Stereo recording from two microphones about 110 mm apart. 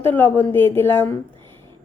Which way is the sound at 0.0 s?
15° left (ahead or behind).